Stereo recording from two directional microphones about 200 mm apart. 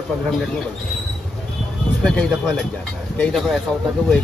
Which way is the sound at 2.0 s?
5° left (ahead or behind).